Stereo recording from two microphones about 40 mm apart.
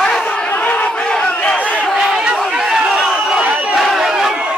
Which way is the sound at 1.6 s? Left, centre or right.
Left.